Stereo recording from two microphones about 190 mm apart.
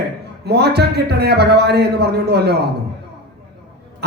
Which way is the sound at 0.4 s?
60° right (ahead or behind).